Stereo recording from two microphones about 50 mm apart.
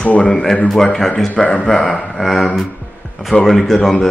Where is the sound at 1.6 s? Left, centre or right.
Centre.